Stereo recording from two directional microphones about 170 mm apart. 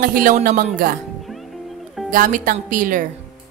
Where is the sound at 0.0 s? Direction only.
55° right (ahead or behind).